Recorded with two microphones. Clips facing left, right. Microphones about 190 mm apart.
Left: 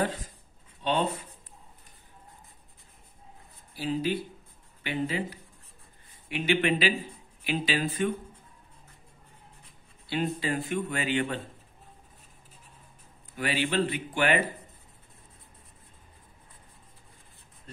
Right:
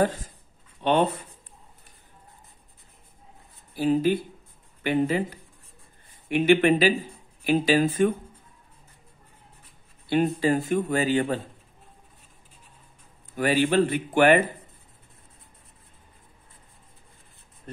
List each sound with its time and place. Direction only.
0.0 s speech: 45° right (ahead or behind)
3.7 s speech: 50° right (ahead or behind)
10.0 s speech: 45° right (ahead or behind)
13.4 s speech: 45° right (ahead or behind)